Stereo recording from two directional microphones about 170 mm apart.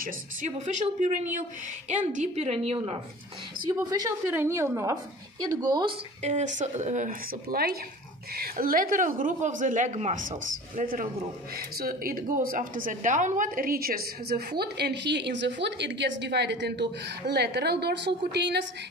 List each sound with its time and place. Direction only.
0.5 s a woman's voice: 45° right (ahead or behind)
3.6 s a woman's voice: 25° right (ahead or behind)
6.2 s a woman's voice: 40° right (ahead or behind); by 18.7 s 85° right